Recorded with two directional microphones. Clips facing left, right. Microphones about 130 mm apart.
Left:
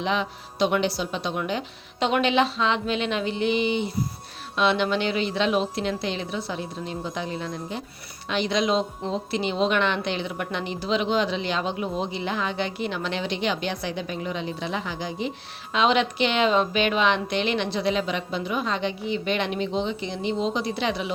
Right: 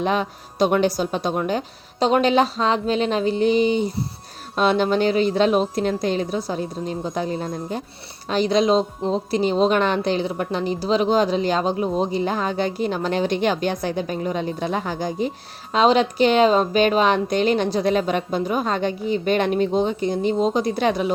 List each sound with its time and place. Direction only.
0.0 s a woman's voice: 45° right (ahead or behind)